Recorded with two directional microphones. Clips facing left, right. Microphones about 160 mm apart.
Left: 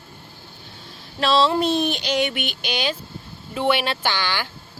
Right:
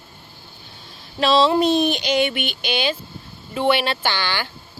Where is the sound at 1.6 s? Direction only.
35° left (ahead or behind).